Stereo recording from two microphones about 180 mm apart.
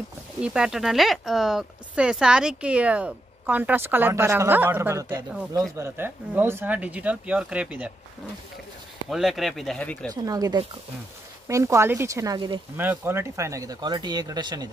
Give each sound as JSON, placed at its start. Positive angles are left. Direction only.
{"t": 0.4, "sound": "speech", "side_deg": -5}
{"t": 9.1, "sound": "speech", "side_deg": 0}
{"t": 10.0, "sound": "speech", "side_deg": -20}
{"t": 12.7, "sound": "speech", "side_deg": -10}